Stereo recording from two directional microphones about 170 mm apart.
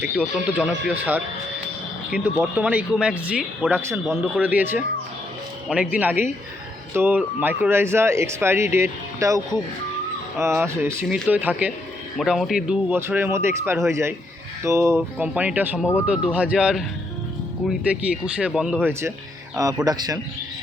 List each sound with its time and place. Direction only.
0.4 s a man's voice: 10° right (ahead or behind)